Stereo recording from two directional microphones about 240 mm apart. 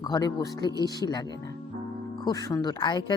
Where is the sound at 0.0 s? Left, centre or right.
Centre.